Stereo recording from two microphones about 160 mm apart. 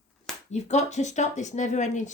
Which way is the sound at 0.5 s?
45° left (ahead or behind).